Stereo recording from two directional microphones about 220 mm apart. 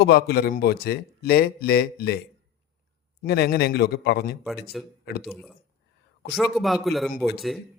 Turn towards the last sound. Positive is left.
turn(degrees=0)  # may be behind; listen again after turning